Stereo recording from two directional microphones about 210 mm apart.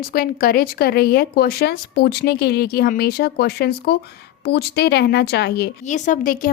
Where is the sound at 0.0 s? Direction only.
45° left (ahead or behind).